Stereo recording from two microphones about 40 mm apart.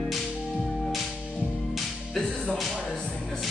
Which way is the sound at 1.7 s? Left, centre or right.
Centre.